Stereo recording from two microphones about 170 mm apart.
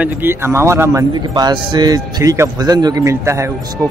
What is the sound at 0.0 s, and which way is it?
A man's voice, 15° right (ahead or behind).